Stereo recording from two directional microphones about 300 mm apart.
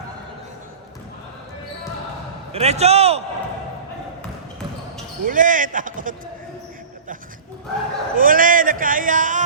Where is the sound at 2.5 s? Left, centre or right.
Right.